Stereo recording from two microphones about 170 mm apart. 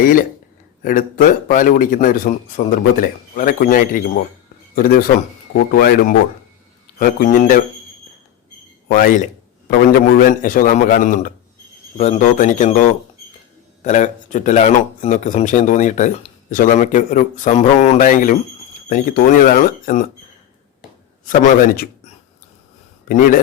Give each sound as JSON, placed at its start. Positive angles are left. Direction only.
{"t": 0.0, "sound": "a man's voice", "side_deg": 55}
{"t": 8.9, "sound": "speech", "side_deg": 55}
{"t": 11.9, "sound": "speech", "side_deg": 40}
{"t": 21.2, "sound": "a man's voice", "side_deg": 55}
{"t": 23.0, "sound": "speech", "side_deg": 50}